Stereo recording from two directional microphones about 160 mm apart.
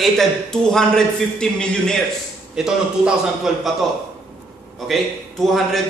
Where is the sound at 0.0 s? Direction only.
5° left (ahead or behind).